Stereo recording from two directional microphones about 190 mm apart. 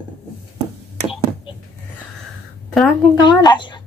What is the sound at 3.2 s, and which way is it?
Speech, 25° left (ahead or behind).